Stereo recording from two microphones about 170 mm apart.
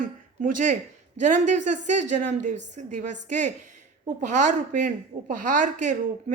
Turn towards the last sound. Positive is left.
turn(degrees=-45)  # may be behind; listen again after turning